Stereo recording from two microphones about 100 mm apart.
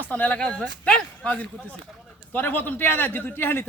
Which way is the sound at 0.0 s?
15° left (ahead or behind).